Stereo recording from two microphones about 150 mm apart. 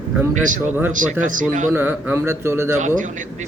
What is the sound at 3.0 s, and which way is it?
Speech, 55° right (ahead or behind).